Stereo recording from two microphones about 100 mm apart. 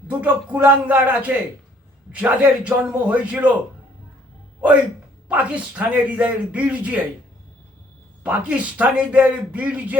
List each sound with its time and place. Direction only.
0.1 s a man's voice: 15° right (ahead or behind)
5.3 s a man's voice: 15° right (ahead or behind)
8.2 s a man's voice: 15° right (ahead or behind)